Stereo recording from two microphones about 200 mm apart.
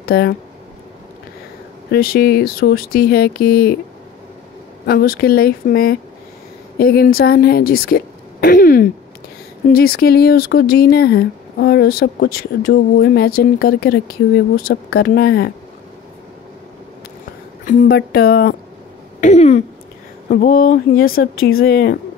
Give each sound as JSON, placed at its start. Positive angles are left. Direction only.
{"t": 0.0, "sound": "speech", "side_deg": 50}
{"t": 1.9, "sound": "speech", "side_deg": 50}
{"t": 4.8, "sound": "speech", "side_deg": 45}
{"t": 17.6, "sound": "speech", "side_deg": 45}
{"t": 19.2, "sound": "speech", "side_deg": 35}
{"t": 20.2, "sound": "speech", "side_deg": 45}